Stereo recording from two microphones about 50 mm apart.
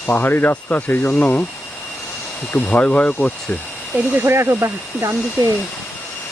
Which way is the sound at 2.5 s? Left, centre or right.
Left.